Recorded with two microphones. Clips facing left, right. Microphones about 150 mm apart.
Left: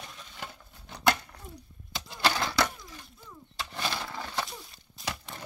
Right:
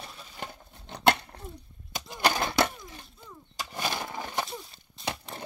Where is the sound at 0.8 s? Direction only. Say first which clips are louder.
Right 3 dB; 30° right (ahead or behind).